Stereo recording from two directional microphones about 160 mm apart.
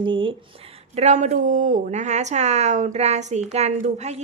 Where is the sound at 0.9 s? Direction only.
45° right (ahead or behind).